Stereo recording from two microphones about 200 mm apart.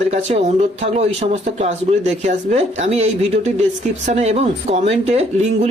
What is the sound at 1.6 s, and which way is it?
Speech, 30° right (ahead or behind).